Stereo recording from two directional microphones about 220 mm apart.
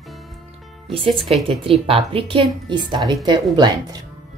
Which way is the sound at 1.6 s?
25° right (ahead or behind).